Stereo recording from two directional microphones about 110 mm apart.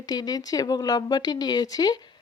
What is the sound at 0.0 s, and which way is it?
Speech, 35° left (ahead or behind).